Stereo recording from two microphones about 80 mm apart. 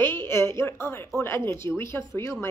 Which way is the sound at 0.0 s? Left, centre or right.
Left.